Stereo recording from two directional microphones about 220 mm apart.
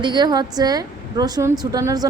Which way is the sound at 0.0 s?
20° right (ahead or behind).